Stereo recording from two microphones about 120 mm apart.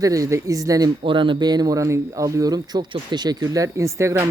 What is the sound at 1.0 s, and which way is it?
Speech, 45° right (ahead or behind).